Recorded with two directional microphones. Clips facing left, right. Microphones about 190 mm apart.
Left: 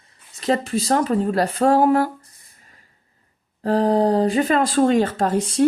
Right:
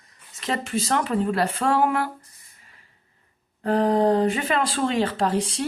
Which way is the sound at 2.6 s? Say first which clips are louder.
Left 3 dB; 40° left (ahead or behind).